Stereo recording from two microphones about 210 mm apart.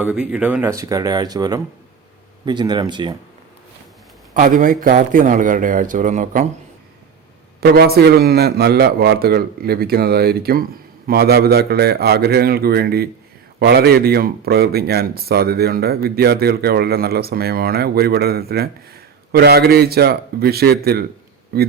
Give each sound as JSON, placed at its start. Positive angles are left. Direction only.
{"t": 0.0, "sound": "speech", "side_deg": -5}
{"t": 4.4, "sound": "speech", "side_deg": -40}
{"t": 7.6, "sound": "a man's voice", "side_deg": -50}